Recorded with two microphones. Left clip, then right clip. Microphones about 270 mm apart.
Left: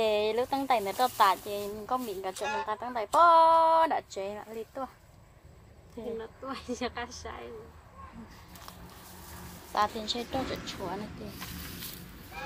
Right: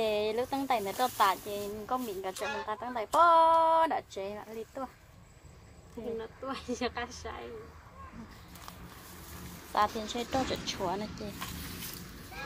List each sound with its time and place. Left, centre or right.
0.0 s speech: centre
2.0 s a woman's voice: centre
6.1 s a woman's voice: centre
9.7 s a woman's voice: centre
10.5 s speech: centre
11.3 s a woman's voice: centre